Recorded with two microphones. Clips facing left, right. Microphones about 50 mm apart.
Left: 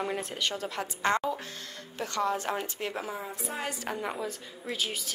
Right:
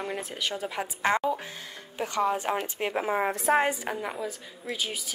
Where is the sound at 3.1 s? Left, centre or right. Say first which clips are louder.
Right 13 dB; right.